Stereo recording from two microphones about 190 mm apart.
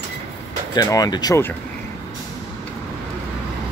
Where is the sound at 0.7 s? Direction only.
20° left (ahead or behind).